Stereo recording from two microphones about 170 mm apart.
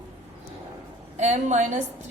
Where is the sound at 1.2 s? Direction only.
45° right (ahead or behind).